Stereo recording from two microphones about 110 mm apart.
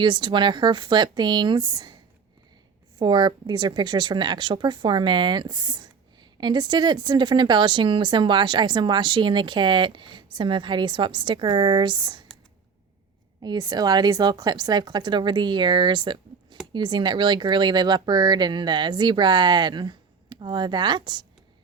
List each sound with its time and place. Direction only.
0.0 s a woman's voice: 45° right (ahead or behind)
3.0 s a woman's voice: 45° right (ahead or behind)
13.4 s a woman's voice: 40° right (ahead or behind)